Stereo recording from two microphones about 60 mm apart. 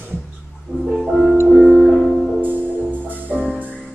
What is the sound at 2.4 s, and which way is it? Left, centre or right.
Music, right.